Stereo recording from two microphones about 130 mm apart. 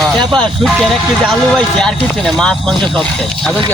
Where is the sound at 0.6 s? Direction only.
Centre (ahead or behind).